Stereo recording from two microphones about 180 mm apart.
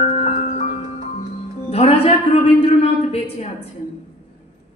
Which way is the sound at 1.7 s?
35° left (ahead or behind).